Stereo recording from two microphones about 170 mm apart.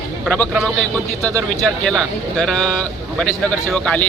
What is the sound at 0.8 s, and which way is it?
A man's voice, 5° left (ahead or behind).